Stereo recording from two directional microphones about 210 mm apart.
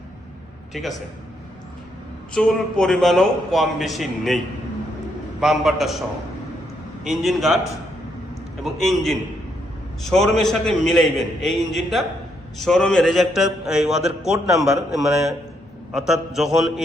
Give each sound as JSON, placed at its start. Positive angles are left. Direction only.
{"t": 2.3, "sound": "a man's voice", "side_deg": 5}
{"t": 5.4, "sound": "a man's voice", "side_deg": 0}
{"t": 7.0, "sound": "a man's voice", "side_deg": 0}
{"t": 8.6, "sound": "a man's voice", "side_deg": 0}